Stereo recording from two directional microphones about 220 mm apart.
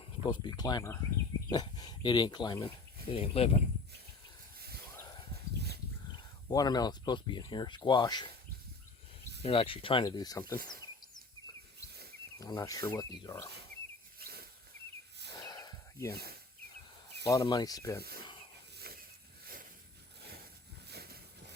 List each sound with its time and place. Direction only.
0.0 s speech: 20° left (ahead or behind)
5.5 s dog: 50° right (ahead or behind)
6.1 s speech: 20° left (ahead or behind)
9.4 s speech: 25° left (ahead or behind)
10.7 s a sound: 20° left (ahead or behind)
12.4 s speech: 15° left (ahead or behind)
14.2 s a sound: 45° right (ahead or behind)
15.4 s snort: 15° left (ahead or behind)
16.1 s speech: 45° right (ahead or behind)
17.3 s speech: 15° left (ahead or behind)
20.9 s a sound: 45° right (ahead or behind)